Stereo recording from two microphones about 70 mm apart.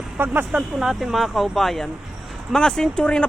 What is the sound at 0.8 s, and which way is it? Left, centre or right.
A man's voice, centre.